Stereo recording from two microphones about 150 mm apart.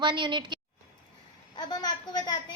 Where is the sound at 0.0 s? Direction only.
30° right (ahead or behind).